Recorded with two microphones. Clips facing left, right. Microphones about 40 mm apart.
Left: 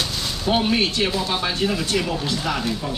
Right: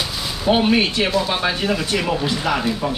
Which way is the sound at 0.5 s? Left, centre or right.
Centre.